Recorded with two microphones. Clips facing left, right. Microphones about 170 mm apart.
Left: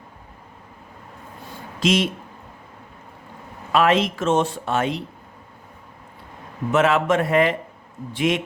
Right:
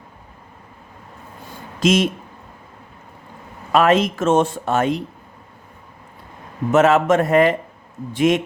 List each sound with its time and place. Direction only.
1.8 s speech: 45° right (ahead or behind)
3.7 s speech: 45° right (ahead or behind)
6.7 s speech: 45° right (ahead or behind)